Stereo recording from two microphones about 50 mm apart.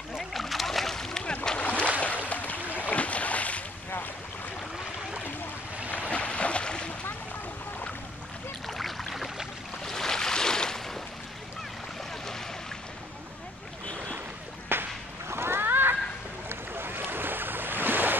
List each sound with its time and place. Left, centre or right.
0.3 s splash: centre
1.2 s boat: centre
2.2 s a sound: left
2.8 s boat: left
5.9 s boat: left
8.6 s boat: centre
14.7 s a sound: right
16.4 s boat: right